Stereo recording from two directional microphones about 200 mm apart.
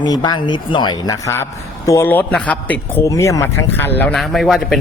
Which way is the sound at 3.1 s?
15° left (ahead or behind).